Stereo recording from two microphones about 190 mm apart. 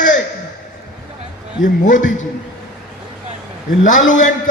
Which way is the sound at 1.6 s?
40° left (ahead or behind).